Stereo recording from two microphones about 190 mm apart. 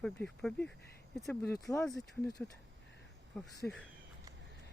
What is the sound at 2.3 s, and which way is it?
Speech, 20° left (ahead or behind).